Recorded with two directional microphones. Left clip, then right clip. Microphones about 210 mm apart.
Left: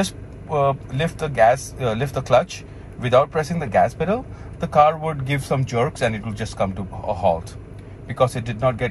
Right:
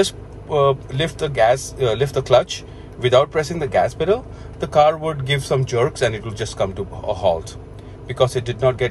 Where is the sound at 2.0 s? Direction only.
10° right (ahead or behind).